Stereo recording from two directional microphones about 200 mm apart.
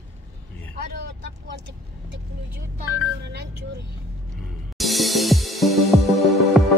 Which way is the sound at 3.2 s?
55° right (ahead or behind).